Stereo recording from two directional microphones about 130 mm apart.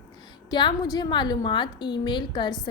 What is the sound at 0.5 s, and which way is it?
A woman's voice, 35° left (ahead or behind).